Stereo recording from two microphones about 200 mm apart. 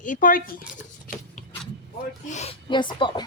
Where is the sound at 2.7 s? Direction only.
25° left (ahead or behind).